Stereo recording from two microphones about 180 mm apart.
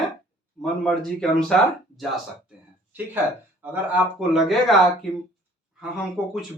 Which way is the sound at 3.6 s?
10° right (ahead or behind).